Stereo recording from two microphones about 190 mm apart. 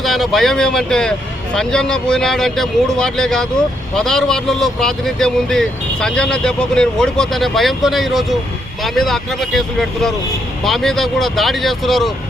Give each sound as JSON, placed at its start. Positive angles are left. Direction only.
{"t": 0.0, "sound": "speech", "side_deg": 0}